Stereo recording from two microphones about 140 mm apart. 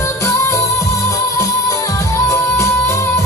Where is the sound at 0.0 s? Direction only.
20° left (ahead or behind).